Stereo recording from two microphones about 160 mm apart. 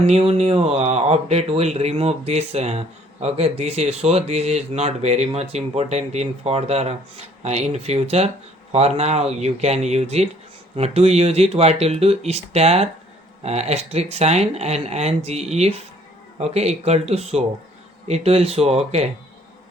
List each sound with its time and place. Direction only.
0.0 s speech: 35° right (ahead or behind)